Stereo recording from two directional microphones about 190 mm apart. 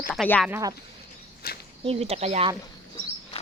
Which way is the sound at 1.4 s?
50° left (ahead or behind).